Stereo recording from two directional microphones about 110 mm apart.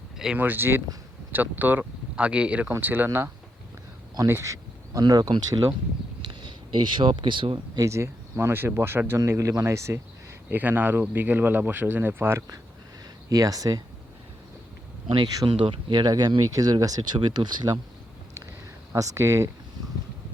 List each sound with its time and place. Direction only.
0.3 s speech: 15° right (ahead or behind)
4.3 s speech: 25° right (ahead or behind)
7.0 s speech: 50° right (ahead or behind)
7.8 s speech: 25° right (ahead or behind)
13.3 s speech: 35° right (ahead or behind)
15.1 s speech: 40° right (ahead or behind)
18.9 s speech: 30° right (ahead or behind)